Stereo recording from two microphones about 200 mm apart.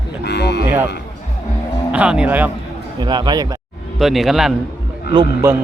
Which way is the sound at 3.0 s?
20° right (ahead or behind).